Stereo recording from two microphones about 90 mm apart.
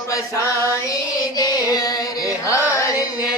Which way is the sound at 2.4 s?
35° left (ahead or behind).